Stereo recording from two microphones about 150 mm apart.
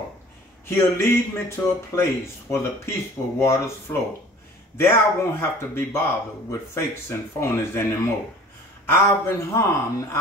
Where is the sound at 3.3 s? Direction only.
15° left (ahead or behind).